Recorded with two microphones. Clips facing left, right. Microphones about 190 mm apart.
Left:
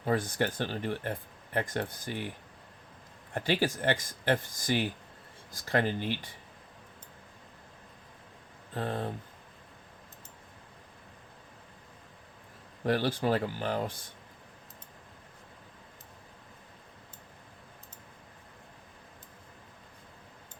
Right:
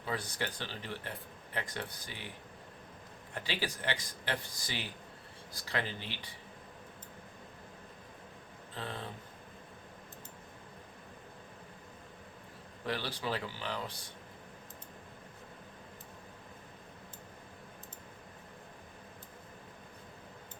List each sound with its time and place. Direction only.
0.0 s speech: 50° left (ahead or behind)
3.3 s speech: 50° left (ahead or behind)
8.7 s speech: 50° left (ahead or behind)
12.8 s speech: 50° left (ahead or behind)